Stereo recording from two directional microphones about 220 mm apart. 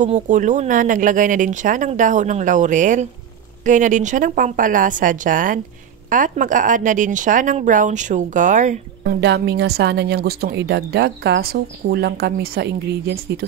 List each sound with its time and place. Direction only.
0.0 s speech: 35° right (ahead or behind)
9.2 s speech: 50° right (ahead or behind)